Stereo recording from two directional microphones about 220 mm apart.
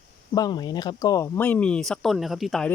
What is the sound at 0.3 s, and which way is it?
Speech, 20° left (ahead or behind).